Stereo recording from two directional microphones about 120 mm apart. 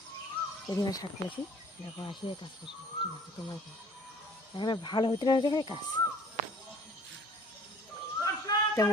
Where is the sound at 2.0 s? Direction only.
45° left (ahead or behind).